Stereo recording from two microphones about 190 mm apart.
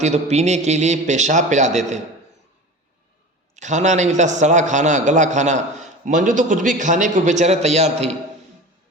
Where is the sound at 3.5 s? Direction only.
40° right (ahead or behind).